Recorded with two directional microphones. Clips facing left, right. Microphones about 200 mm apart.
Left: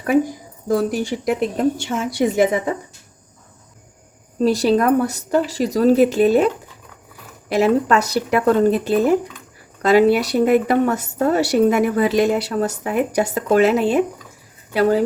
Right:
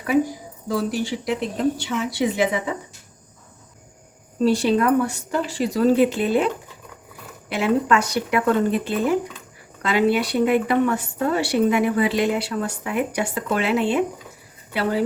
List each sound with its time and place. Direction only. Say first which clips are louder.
0.7 s a woman's voice: left 4 dB; 50° left (ahead or behind)
4.4 s speech: left 2 dB; 40° left (ahead or behind)
7.5 s speech: left 4 dB; 40° left (ahead or behind)